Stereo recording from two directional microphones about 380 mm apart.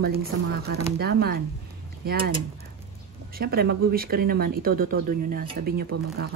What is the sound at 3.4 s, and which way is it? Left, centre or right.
Speech, right.